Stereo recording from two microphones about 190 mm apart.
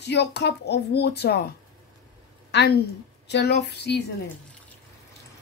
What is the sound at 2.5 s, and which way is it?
A woman's voice, 65° left (ahead or behind).